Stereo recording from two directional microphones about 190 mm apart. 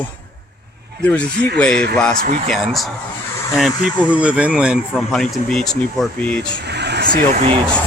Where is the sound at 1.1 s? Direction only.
5° left (ahead or behind).